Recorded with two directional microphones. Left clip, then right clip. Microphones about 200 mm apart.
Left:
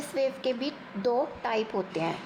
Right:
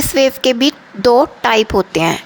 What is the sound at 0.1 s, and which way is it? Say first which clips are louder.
A woman's voice: right 15 dB; 40° right (ahead or behind).